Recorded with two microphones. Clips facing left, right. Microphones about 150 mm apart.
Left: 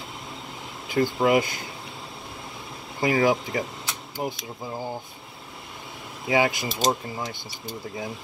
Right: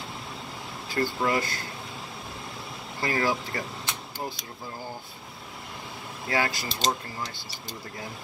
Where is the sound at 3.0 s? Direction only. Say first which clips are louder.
Left 6 dB; 15° left (ahead or behind).